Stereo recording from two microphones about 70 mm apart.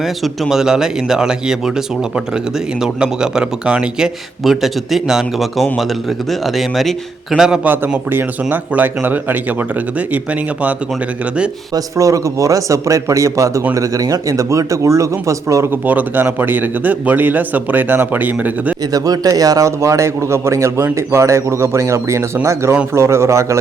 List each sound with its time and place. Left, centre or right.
0.0 s a man's voice: centre
7.6 s speech: right
11.7 s a man's voice: right
15.7 s speech: right
18.9 s a man's voice: right